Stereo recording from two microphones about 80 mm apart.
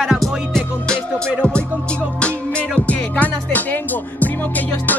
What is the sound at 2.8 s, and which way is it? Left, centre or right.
Speech, centre.